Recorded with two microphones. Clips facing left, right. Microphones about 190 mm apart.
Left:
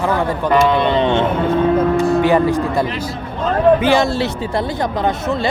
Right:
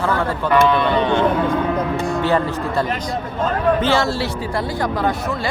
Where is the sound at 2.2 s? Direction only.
15° left (ahead or behind).